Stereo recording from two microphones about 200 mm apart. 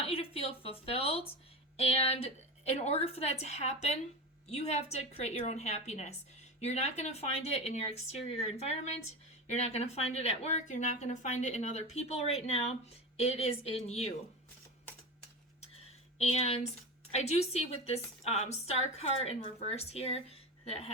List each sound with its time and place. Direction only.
0.0 s speech: 30° left (ahead or behind)
16.1 s speech: 30° left (ahead or behind)